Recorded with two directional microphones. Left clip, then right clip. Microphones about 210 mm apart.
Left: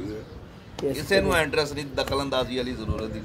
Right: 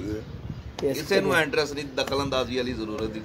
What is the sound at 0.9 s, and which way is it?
A man's voice, 5° left (ahead or behind).